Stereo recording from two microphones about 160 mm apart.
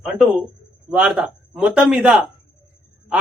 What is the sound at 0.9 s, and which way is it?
A man's voice, 10° right (ahead or behind).